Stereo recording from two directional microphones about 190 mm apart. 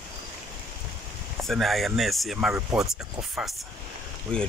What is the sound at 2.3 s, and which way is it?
Speech, 10° right (ahead or behind).